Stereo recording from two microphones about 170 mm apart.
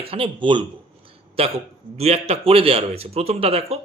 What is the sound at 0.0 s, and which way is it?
A man's voice, 30° right (ahead or behind).